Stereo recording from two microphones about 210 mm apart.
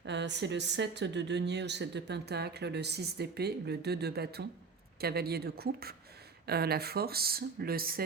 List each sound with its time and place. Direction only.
0.0 s speech: 55° right (ahead or behind)